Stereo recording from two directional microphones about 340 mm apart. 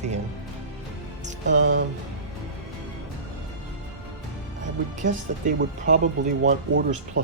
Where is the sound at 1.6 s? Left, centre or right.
Right.